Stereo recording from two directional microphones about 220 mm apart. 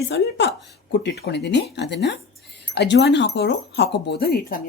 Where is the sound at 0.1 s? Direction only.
55° left (ahead or behind).